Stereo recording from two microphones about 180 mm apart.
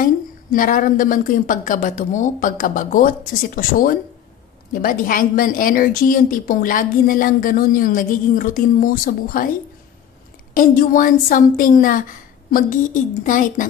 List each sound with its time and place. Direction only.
0.0 s a woman's voice: 50° left (ahead or behind)
10.5 s a woman's voice: 50° left (ahead or behind)